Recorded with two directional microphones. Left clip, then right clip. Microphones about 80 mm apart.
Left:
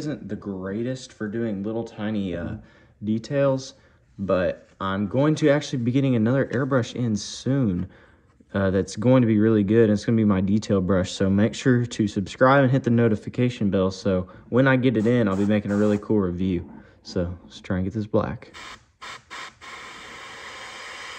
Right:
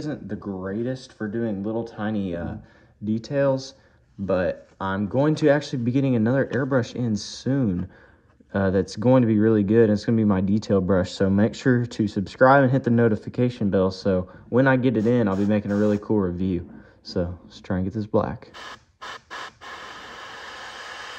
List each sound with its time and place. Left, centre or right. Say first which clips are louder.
0.0 s speech: even; centre
3.1 s speech: even; centre
16.2 s a sound: even; centre